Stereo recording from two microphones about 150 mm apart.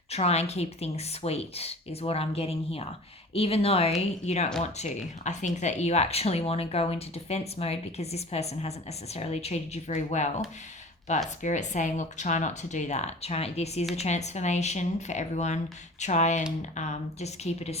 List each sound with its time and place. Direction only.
0.1 s speech: 45° left (ahead or behind)